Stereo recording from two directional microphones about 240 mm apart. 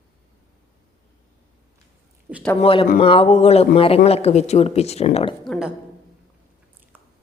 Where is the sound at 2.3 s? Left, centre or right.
Centre.